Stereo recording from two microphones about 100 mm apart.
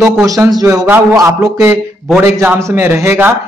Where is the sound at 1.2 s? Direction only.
30° right (ahead or behind).